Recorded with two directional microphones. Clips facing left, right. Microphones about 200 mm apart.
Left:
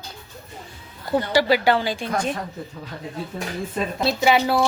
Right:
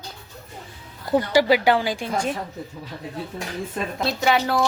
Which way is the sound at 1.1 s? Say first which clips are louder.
Right 1 dB; 15° right (ahead or behind).